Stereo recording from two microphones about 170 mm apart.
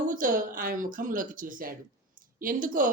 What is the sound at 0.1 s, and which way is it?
A woman's voice, 50° right (ahead or behind).